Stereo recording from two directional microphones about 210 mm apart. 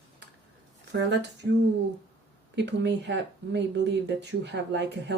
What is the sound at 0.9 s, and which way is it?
Speech, 50° right (ahead or behind).